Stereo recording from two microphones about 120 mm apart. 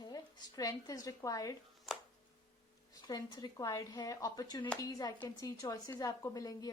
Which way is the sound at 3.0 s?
35° left (ahead or behind).